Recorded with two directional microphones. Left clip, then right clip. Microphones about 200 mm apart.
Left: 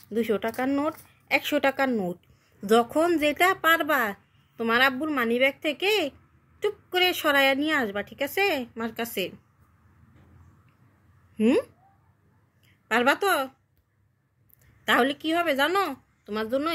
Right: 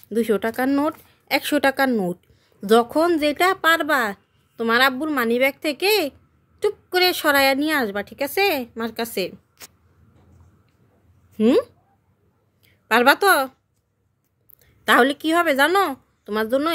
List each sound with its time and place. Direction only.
0.1 s a woman's voice: 30° right (ahead or behind)
4.1 s a sound: 20° right (ahead or behind)
4.9 s a woman's voice: 25° right (ahead or behind)
11.3 s a woman's voice: 30° right (ahead or behind)
12.8 s a woman's voice: 30° right (ahead or behind)
14.9 s a woman's voice: 35° right (ahead or behind)